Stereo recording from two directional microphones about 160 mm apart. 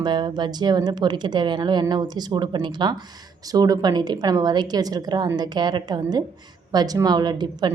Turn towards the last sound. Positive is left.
turn(degrees=-25)  # may be behind; listen again after turning